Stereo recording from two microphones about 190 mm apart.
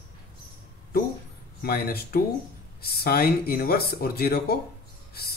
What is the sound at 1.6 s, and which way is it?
Speech, 55° left (ahead or behind).